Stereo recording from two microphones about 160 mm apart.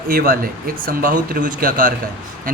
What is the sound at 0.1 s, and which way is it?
A man's voice, 65° right (ahead or behind).